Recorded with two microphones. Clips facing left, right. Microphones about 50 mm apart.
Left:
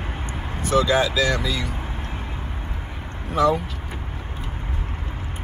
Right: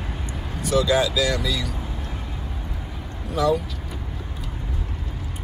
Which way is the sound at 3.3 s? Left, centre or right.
Left.